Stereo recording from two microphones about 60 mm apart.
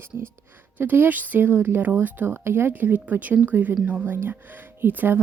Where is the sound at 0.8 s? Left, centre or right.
Right.